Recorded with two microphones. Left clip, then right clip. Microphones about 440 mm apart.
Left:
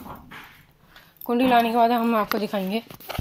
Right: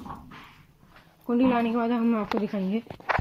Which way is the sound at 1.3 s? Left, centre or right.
Centre.